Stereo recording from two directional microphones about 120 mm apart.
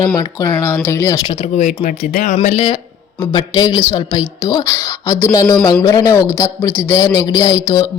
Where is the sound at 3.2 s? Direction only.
35° left (ahead or behind).